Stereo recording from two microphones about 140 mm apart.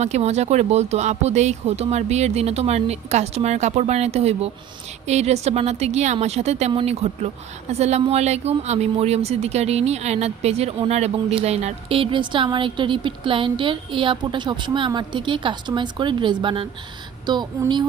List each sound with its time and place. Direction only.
0.0 s speech: 50° right (ahead or behind); by 17.8 s 30° right (ahead or behind)